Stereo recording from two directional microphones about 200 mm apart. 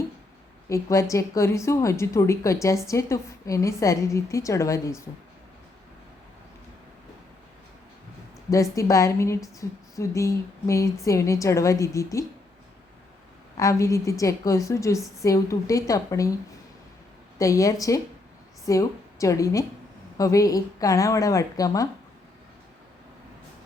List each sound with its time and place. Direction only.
0.7 s a woman's voice: 15° left (ahead or behind)
8.7 s a woman's voice: 15° left (ahead or behind)
13.6 s a woman's voice: 15° left (ahead or behind)
17.3 s a woman's voice: 15° left (ahead or behind)